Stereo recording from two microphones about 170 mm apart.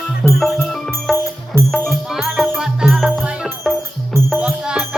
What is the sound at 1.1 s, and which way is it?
Music, 15° right (ahead or behind).